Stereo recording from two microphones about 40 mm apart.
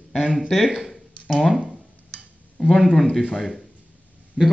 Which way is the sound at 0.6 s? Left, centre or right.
Centre.